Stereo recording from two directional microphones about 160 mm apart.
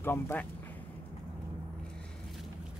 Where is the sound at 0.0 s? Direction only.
15° left (ahead or behind).